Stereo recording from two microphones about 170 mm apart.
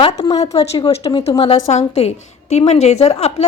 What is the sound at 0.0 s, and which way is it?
Speech, 25° left (ahead or behind).